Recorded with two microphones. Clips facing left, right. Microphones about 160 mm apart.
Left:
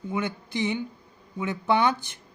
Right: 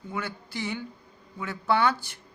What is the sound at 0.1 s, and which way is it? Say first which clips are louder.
Speech: left 5 dB; 20° left (ahead or behind).